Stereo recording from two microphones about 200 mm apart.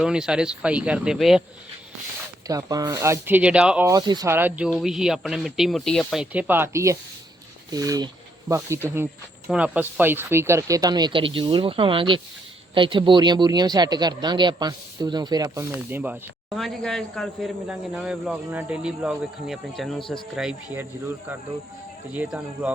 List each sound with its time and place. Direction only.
0.0 s speech: 5° right (ahead or behind)
2.5 s speech: 15° right (ahead or behind)
3.8 s speech: 20° right (ahead or behind)
16.6 s speech: centre (ahead or behind)